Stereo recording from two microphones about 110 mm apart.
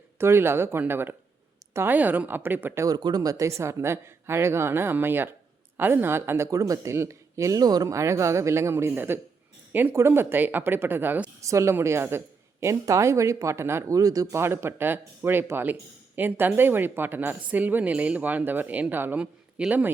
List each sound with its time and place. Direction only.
0.2 s a woman's voice: 20° right (ahead or behind)
2.8 s a woman's voice: 35° right (ahead or behind); by 19.9 s 10° right (ahead or behind)